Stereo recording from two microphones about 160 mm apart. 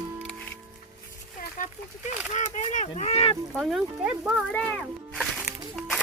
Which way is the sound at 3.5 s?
Centre (ahead or behind).